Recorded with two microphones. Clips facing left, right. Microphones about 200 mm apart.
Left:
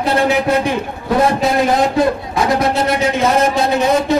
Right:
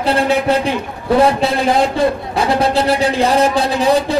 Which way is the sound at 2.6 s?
30° right (ahead or behind).